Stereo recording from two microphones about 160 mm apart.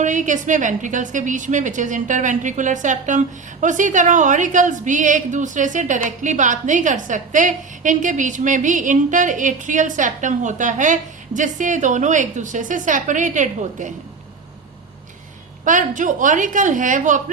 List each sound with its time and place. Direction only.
0.0 s a woman's voice: 50° right (ahead or behind)
15.6 s a woman's voice: 55° right (ahead or behind)